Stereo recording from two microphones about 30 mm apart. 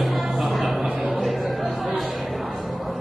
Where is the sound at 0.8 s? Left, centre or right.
Right.